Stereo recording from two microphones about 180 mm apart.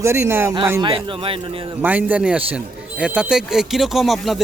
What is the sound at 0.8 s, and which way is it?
Speech, 30° right (ahead or behind).